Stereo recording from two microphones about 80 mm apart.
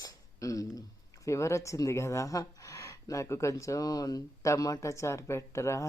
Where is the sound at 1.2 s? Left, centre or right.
Left.